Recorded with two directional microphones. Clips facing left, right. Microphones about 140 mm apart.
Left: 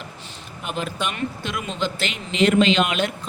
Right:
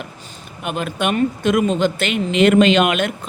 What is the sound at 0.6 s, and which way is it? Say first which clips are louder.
A man's voice: right 5 dB; 55° right (ahead or behind).